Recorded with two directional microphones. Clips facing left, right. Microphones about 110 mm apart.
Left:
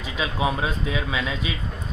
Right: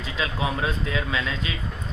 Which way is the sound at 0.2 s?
20° left (ahead or behind).